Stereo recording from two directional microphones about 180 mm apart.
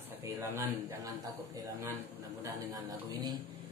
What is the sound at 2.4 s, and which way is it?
Speech, 20° right (ahead or behind).